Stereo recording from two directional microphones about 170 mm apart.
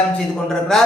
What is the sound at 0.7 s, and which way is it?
Speech, 5° left (ahead or behind).